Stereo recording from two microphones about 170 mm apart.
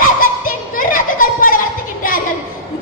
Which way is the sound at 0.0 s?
55° left (ahead or behind).